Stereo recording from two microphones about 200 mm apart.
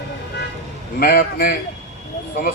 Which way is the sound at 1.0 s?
50° left (ahead or behind).